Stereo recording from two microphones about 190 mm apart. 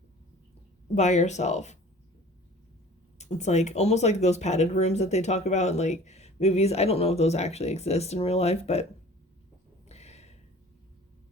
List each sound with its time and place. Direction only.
0.9 s speech: 35° left (ahead or behind)
3.2 s speech: 35° left (ahead or behind)
9.9 s a sound: 35° left (ahead or behind)